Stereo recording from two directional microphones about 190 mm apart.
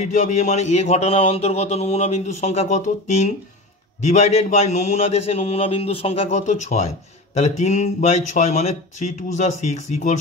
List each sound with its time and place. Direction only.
0.0 s speech: 40° left (ahead or behind)